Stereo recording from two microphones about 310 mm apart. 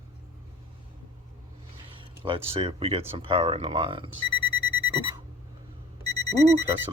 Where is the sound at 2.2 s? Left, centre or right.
Centre.